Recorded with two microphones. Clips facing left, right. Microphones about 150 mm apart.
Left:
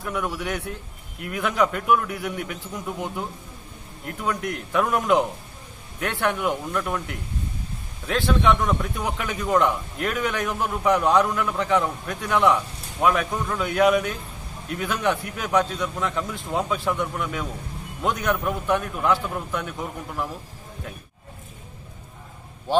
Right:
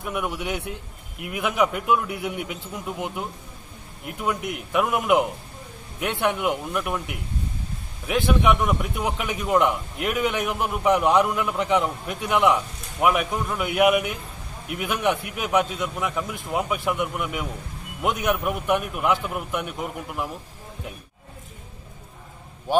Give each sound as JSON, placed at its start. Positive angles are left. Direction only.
{"t": 0.0, "sound": "a man's voice", "side_deg": -15}
{"t": 22.7, "sound": "a man's voice", "side_deg": -10}